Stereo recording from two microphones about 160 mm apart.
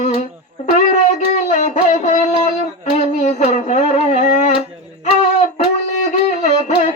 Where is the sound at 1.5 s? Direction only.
50° left (ahead or behind).